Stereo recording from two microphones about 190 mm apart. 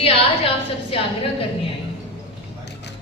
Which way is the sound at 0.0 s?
30° left (ahead or behind).